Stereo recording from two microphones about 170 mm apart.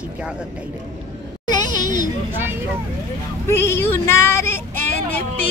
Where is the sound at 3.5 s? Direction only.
15° left (ahead or behind).